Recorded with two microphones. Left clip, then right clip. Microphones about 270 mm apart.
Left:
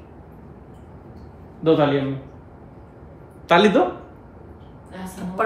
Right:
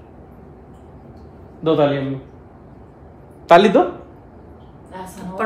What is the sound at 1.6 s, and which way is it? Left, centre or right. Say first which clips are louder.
Speech: even; centre.